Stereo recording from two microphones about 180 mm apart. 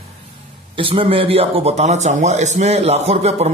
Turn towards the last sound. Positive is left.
turn(degrees=-35)  # may be behind; listen again after turning